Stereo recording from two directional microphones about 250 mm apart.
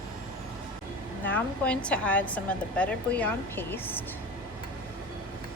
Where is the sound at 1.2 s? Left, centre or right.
Centre.